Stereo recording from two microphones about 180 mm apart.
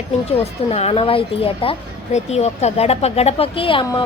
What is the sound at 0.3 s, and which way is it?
A woman's voice, 35° left (ahead or behind).